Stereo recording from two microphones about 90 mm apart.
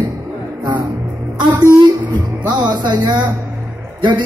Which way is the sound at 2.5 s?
55° right (ahead or behind).